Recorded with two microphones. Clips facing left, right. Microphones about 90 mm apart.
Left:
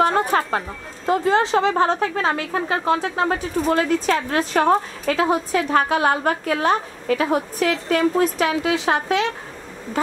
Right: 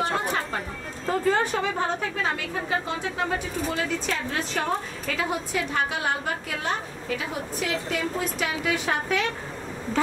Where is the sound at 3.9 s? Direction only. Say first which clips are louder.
Left 8 dB; 50° left (ahead or behind).